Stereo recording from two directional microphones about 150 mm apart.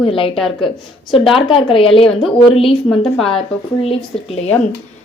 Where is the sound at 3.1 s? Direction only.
Centre (ahead or behind).